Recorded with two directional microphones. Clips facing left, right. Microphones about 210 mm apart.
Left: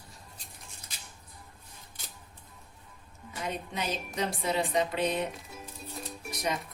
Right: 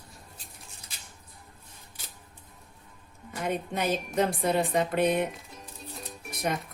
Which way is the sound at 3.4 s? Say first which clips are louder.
Right 5 dB; 55° right (ahead or behind).